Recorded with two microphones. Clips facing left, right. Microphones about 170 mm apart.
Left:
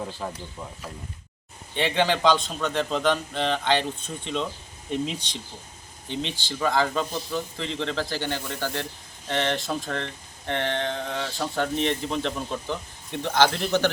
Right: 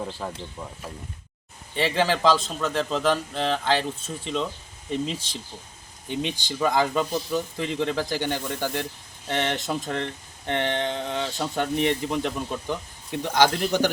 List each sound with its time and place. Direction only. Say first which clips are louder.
0.2 s a man's voice: even; centre (ahead or behind)
1.7 s a man's voice: even; centre (ahead or behind)